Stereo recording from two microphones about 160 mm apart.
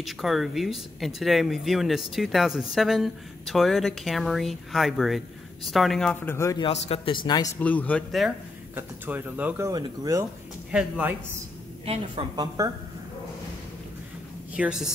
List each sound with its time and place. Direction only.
0.0 s speech: centre (ahead or behind)
6.3 s a man's voice: 20° left (ahead or behind)
6.6 s a man's voice: 35° left (ahead or behind)
7.6 s speech: 10° left (ahead or behind)
8.2 s speech: centre (ahead or behind)
8.7 s speech: 10° right (ahead or behind)
9.7 s speech: 20° right (ahead or behind)
10.7 s speech: 5° right (ahead or behind)
11.8 s a woman's voice: 35° right (ahead or behind)
14.5 s a woman's voice: 5° right (ahead or behind)